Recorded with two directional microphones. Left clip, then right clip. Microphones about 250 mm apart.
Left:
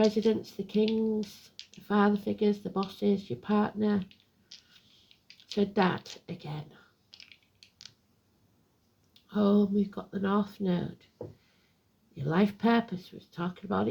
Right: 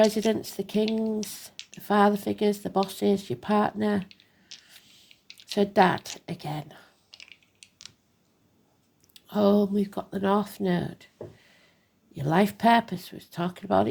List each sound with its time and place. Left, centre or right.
0.0 s speech: right
4.0 s a sound: centre
5.5 s speech: right
7.1 s a sound: centre
9.1 s speech: right
12.1 s speech: right